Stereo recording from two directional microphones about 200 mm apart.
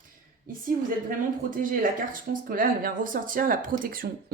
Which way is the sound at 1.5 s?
45° right (ahead or behind).